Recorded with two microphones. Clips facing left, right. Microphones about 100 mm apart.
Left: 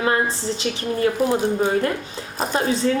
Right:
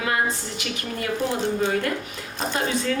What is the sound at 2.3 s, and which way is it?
Music, 40° left (ahead or behind).